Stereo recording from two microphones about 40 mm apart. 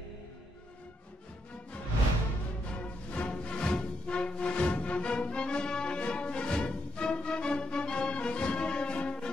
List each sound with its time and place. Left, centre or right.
2.7 s music: left